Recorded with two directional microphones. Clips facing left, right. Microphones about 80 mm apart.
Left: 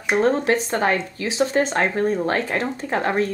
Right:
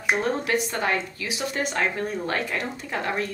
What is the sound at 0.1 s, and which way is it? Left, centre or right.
A woman's voice, left.